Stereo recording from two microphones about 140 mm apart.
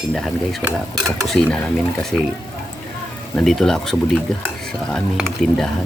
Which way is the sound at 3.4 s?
5° left (ahead or behind).